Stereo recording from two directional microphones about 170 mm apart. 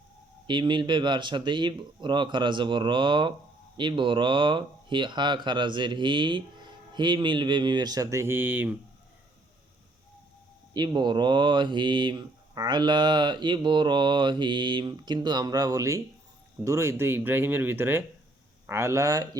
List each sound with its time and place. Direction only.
0.4 s speech: 25° right (ahead or behind); by 8.8 s 10° right (ahead or behind)
10.8 s speech: 25° right (ahead or behind)